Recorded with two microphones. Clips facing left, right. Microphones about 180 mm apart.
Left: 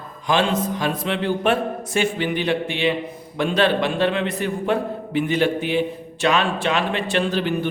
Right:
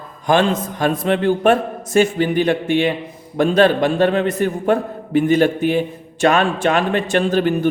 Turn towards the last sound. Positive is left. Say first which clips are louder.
# right 6 dB
turn(degrees=-45)  # may be behind; listen again after turning